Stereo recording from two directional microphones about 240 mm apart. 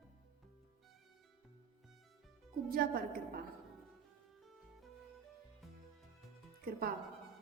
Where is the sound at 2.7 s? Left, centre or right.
Right.